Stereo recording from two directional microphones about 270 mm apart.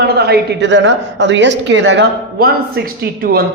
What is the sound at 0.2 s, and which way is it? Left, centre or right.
A woman's voice, right.